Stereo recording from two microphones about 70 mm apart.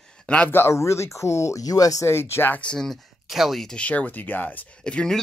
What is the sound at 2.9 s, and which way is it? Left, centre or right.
Speech, centre.